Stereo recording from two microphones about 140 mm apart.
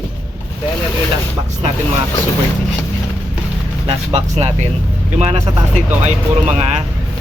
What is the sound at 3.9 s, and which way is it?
Speech, 45° right (ahead or behind).